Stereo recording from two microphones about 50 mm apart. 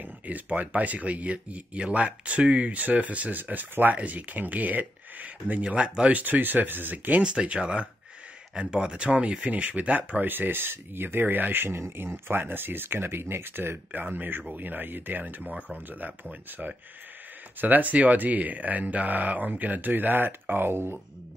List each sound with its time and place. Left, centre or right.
0.0 s speech: right
6.2 s speech: right
7.2 s speech: centre; by 13.7 s right
13.9 s speech: right